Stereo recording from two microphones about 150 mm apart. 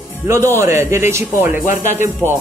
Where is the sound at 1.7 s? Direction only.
55° left (ahead or behind).